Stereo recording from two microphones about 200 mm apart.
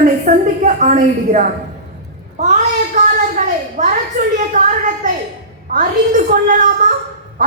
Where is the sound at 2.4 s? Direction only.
40° right (ahead or behind).